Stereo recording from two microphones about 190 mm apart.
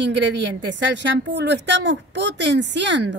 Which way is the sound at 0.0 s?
70° right (ahead or behind).